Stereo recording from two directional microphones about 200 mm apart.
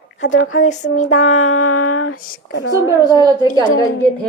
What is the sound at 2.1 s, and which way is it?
Speech, 45° left (ahead or behind).